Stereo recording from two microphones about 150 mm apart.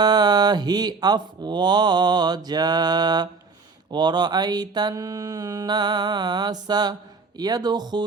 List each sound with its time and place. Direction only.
0.0 s speech: 25° right (ahead or behind)